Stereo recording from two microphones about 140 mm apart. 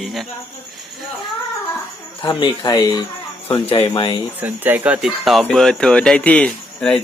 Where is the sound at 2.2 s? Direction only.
30° left (ahead or behind).